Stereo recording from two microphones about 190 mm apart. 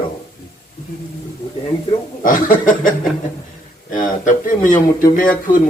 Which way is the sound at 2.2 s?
45° left (ahead or behind).